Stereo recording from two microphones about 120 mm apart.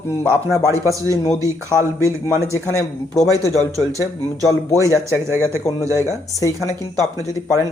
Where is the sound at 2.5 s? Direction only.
25° left (ahead or behind).